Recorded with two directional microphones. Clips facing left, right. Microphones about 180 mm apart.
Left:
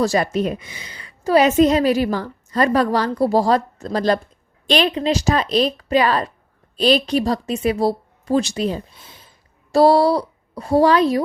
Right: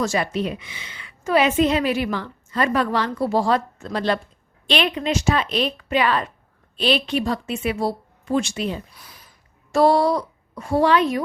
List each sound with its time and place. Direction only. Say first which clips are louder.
0.0 s a woman's voice: left 4 dB; 40° left (ahead or behind)
8.9 s a sound: left 2 dB; 25° left (ahead or behind)
9.7 s a woman's voice: left 3 dB; 35° left (ahead or behind)